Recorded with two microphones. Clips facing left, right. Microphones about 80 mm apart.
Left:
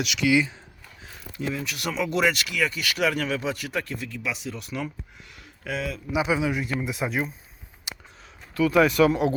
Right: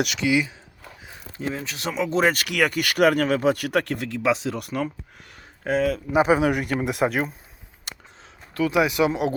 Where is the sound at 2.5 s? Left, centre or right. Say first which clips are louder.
Right 4 dB; right.